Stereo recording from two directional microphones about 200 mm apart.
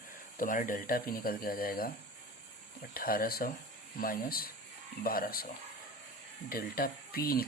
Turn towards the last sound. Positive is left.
turn(degrees=50)  # may be behind; listen again after turning